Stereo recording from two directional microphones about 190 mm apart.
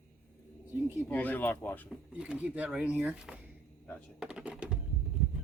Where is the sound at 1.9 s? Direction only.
5° right (ahead or behind).